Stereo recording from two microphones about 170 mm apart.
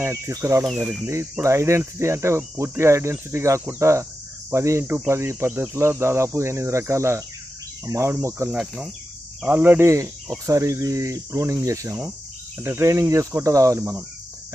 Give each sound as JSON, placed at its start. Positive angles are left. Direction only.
{"t": 0.0, "sound": "cricket", "side_deg": -15}
{"t": 8.5, "sound": "cricket", "side_deg": -5}
{"t": 10.4, "sound": "speech", "side_deg": -20}
{"t": 12.5, "sound": "cricket", "side_deg": -15}